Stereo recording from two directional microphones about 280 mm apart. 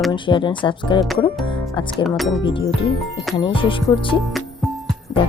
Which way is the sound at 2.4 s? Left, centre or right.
Centre.